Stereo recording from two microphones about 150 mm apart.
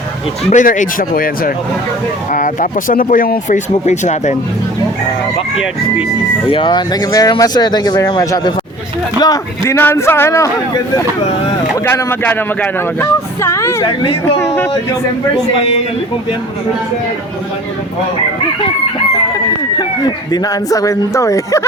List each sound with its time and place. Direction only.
0.5 s speech: 60° left (ahead or behind)
2.3 s speech: 60° left (ahead or behind)
6.5 s speech: 30° left (ahead or behind)
11.9 s speech: 15° left (ahead or behind)
13.8 s speech: 35° left (ahead or behind)
14.3 s speech: 15° left (ahead or behind)
20.0 s speech: 25° left (ahead or behind)